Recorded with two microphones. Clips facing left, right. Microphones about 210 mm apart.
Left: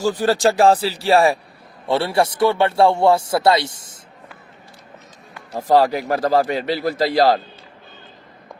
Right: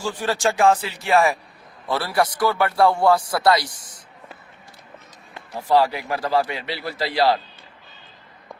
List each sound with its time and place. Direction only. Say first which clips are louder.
0.0 s speech: left 6 dB; 40° left (ahead or behind)
5.5 s speech: left 3 dB; 40° left (ahead or behind)